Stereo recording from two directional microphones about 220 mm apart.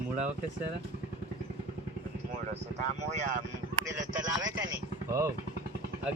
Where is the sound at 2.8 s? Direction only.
35° right (ahead or behind).